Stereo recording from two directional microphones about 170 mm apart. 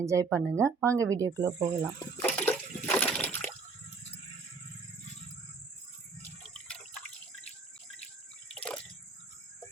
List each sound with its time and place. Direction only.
0.0 s speech: 20° right (ahead or behind)
2.2 s water: 10° left (ahead or behind)